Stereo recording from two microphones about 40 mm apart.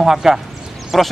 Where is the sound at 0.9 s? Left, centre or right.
Centre.